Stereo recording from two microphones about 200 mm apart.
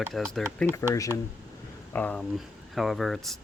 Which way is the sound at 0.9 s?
15° left (ahead or behind).